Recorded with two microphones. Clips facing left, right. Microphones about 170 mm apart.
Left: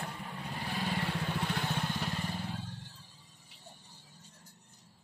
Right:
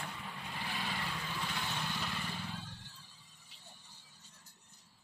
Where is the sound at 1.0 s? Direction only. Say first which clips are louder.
Left 6 dB; 65° left (ahead or behind); by 2.6 s 40° left (ahead or behind).